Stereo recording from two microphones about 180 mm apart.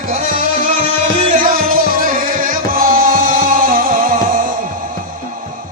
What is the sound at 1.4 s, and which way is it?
Music, 55° right (ahead or behind).